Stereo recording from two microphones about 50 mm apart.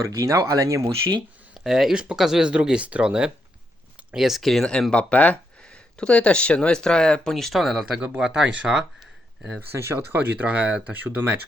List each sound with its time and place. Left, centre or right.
0.0 s speech: right
1.5 s speech: centre
4.9 s speech: left
5.6 s speech: centre
8.2 s speech: centre
9.7 s speech: right
10.3 s speech: right